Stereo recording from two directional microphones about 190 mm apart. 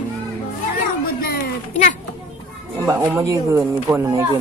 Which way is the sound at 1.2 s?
50° left (ahead or behind).